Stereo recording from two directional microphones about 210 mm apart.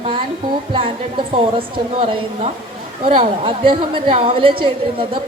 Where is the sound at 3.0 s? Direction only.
25° right (ahead or behind).